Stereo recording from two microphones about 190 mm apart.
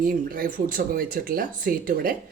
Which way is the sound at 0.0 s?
45° right (ahead or behind).